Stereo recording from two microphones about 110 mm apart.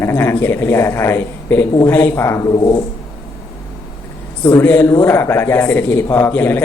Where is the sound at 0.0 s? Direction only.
20° left (ahead or behind).